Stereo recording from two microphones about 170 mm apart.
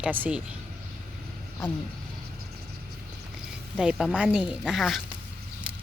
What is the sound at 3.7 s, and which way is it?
Speech, 5° right (ahead or behind).